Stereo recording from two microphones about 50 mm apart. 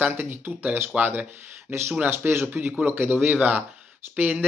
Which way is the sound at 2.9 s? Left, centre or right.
Right.